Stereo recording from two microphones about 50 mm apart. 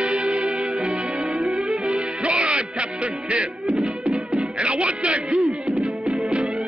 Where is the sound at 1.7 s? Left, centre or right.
Right.